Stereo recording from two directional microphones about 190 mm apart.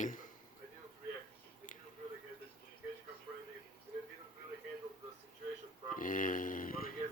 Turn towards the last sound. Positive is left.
turn(degrees=50)  # may be behind; listen again after turning